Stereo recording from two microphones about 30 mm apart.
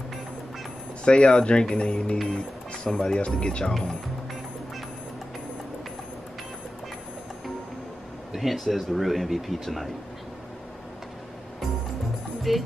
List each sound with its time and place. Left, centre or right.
1.0 s speech: left
2.2 s music: left
2.9 s speech: left
8.4 s speech: centre
12.5 s speech: centre